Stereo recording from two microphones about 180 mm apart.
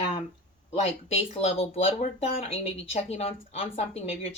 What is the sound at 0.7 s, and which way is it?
Speech, 35° left (ahead or behind).